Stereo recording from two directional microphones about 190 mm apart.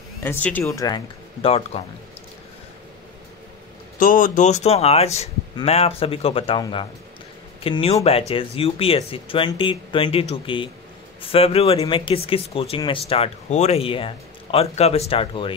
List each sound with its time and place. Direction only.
0.2 s speech: 10° left (ahead or behind); by 1.8 s 30° left (ahead or behind)
4.0 s speech: 45° left (ahead or behind); by 15.5 s 30° left (ahead or behind)